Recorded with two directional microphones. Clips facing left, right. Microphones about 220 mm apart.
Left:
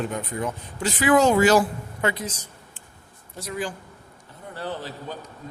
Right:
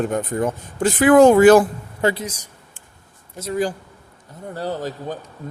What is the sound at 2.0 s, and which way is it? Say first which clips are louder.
Speech: right 6 dB; 35° right (ahead or behind).